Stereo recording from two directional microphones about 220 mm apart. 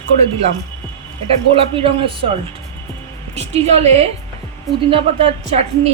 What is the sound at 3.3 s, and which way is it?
Speech, 30° right (ahead or behind).